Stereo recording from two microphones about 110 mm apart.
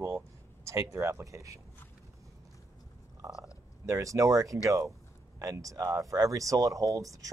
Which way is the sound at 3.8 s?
30° right (ahead or behind).